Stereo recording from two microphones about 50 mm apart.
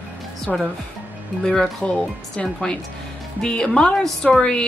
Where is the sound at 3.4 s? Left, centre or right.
Centre.